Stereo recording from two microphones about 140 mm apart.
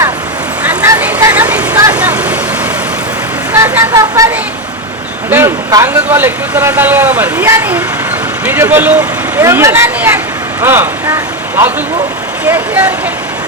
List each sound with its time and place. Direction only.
0.6 s vehicle: 10° right (ahead or behind)
3.5 s speech: 15° right (ahead or behind)
5.3 s speech: 20° right (ahead or behind)